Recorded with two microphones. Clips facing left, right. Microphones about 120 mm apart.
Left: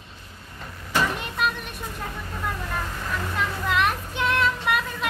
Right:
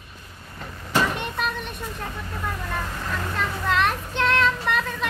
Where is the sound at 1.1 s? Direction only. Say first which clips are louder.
Left 1 dB; 5° left (ahead or behind).